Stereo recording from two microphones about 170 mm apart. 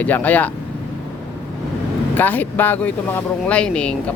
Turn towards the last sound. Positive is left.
turn(degrees=5)  # may be behind; listen again after turning